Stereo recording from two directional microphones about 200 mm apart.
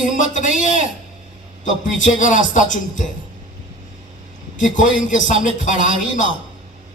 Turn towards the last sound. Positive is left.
turn(degrees=40)  # may be behind; listen again after turning